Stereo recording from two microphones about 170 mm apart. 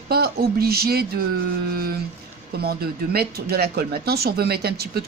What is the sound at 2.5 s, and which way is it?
Speech, 65° right (ahead or behind).